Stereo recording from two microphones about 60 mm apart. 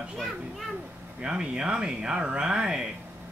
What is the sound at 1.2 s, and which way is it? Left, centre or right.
Speech, centre.